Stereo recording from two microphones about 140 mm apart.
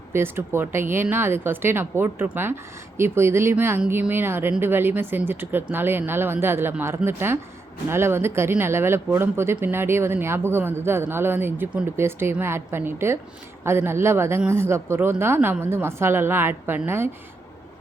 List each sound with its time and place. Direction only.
0.1 s speech: 15° right (ahead or behind)